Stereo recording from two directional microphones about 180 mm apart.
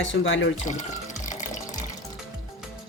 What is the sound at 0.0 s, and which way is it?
Speech, 90° left.